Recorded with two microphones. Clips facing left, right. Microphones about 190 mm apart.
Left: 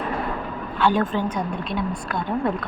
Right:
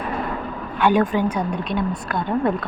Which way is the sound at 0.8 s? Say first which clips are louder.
Right 3 dB; 15° right (ahead or behind).